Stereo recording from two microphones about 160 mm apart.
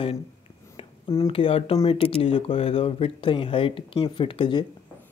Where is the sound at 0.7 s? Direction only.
20° left (ahead or behind).